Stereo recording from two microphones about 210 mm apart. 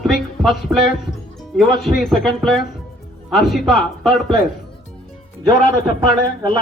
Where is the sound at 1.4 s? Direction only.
Centre (ahead or behind).